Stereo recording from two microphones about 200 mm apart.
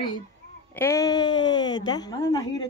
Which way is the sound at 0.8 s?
15° left (ahead or behind).